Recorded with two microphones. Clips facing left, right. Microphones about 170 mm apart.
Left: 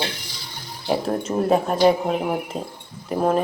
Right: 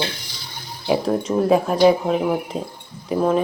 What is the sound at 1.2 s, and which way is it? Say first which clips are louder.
Speech: right 2 dB; centre (ahead or behind).